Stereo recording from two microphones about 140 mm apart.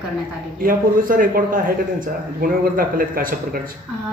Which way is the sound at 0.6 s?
90° right.